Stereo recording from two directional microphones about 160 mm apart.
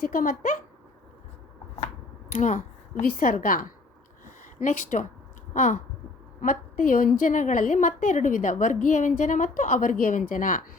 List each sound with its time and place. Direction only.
0.0 s a woman's voice: 60° left (ahead or behind)
2.3 s speech: 50° left (ahead or behind)
2.9 s a woman's voice: 60° left (ahead or behind)